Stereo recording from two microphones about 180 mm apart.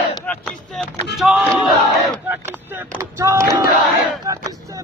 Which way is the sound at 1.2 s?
Centre (ahead or behind).